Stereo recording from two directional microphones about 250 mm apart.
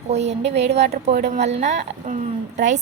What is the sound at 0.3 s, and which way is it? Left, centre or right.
A woman's voice, right.